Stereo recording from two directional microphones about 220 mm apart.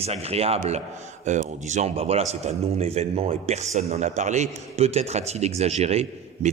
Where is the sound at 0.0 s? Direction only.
30° right (ahead or behind).